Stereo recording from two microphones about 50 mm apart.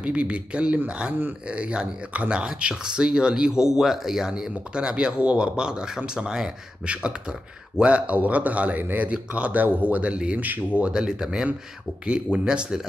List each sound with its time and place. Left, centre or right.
0.0 s a man's voice: right
6.9 s a man's voice: right
10.9 s speech: centre